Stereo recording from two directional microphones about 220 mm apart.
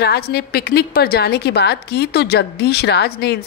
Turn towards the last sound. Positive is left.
turn(degrees=50)  # may be behind; listen again after turning